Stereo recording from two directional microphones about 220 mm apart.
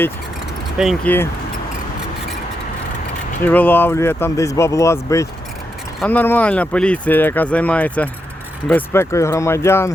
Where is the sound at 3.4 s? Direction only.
10° left (ahead or behind).